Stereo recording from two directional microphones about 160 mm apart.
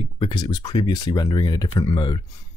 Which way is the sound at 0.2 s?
25° left (ahead or behind).